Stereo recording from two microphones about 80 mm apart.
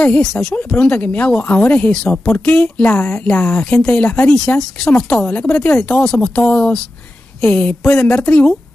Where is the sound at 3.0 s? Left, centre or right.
Left.